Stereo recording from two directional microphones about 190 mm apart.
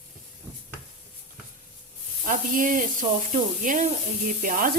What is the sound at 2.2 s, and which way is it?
Speech, 45° right (ahead or behind).